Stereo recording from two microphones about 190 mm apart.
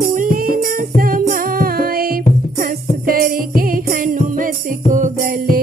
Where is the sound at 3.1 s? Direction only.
50° right (ahead or behind).